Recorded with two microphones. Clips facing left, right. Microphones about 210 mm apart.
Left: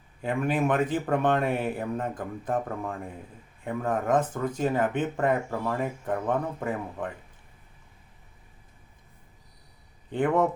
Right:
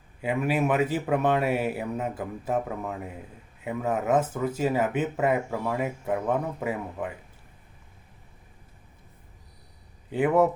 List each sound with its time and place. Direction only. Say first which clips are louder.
0.2 s speech: right 1 dB; 5° right (ahead or behind)
10.1 s speech: right 2 dB; 5° right (ahead or behind)